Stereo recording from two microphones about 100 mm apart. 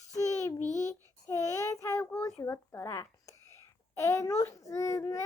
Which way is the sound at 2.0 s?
20° left (ahead or behind).